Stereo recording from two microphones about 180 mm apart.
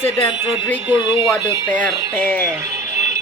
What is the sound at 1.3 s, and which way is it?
Speech, 10° left (ahead or behind).